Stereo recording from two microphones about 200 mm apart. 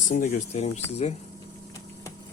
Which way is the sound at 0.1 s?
40° left (ahead or behind).